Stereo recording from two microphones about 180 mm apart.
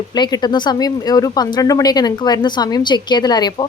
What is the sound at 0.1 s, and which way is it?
Speech, 20° left (ahead or behind).